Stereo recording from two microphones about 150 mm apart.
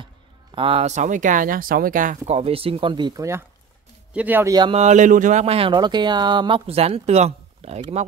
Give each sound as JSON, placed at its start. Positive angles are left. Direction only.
{"t": 0.6, "sound": "speech", "side_deg": -40}
{"t": 2.2, "sound": "speech", "side_deg": -40}
{"t": 4.5, "sound": "speech", "side_deg": -30}
{"t": 4.7, "sound": "speech", "side_deg": -55}